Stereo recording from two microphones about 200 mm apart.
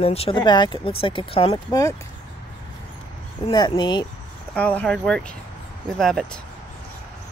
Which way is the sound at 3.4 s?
20° left (ahead or behind).